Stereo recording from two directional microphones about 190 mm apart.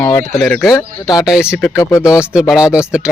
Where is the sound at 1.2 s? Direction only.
5° right (ahead or behind).